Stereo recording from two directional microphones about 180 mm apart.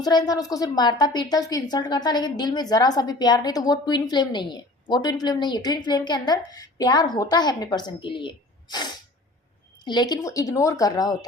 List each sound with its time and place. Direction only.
0.0 s a woman's voice: 20° left (ahead or behind)